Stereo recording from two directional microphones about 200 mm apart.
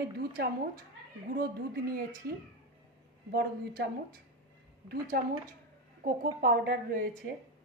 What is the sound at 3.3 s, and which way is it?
Speech, 50° right (ahead or behind).